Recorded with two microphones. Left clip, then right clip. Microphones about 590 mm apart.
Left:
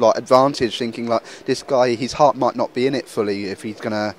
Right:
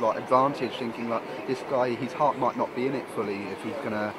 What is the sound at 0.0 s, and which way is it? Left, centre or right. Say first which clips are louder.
Speech: left 9 dB; left.